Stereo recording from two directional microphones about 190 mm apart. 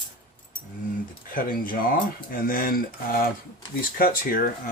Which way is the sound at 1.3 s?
50° left (ahead or behind).